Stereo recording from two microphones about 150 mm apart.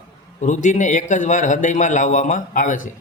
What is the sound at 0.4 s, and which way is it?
A man's voice, 55° left (ahead or behind).